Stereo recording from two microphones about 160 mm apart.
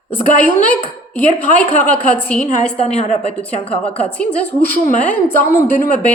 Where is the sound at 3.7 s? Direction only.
5° left (ahead or behind).